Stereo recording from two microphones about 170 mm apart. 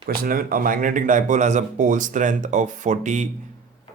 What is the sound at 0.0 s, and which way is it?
Speech, 60° right (ahead or behind).